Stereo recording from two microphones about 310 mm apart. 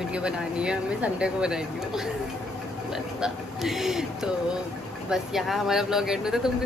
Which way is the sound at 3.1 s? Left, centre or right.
Centre.